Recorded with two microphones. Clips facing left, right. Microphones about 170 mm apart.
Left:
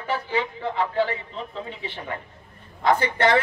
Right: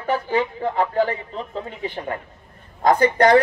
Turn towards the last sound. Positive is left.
turn(degrees=-45)  # may be behind; listen again after turning